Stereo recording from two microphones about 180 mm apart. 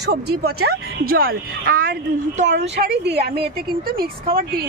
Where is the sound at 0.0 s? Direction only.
60° right (ahead or behind); by 2.5 s 45° right (ahead or behind).